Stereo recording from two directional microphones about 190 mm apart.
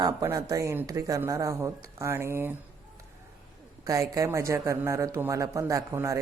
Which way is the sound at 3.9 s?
15° right (ahead or behind).